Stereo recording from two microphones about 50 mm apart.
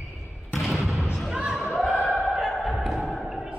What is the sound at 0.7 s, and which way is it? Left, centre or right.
Basketball bounce, centre.